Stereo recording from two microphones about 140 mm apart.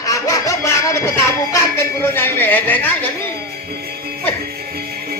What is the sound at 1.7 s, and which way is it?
Speech, 15° left (ahead or behind).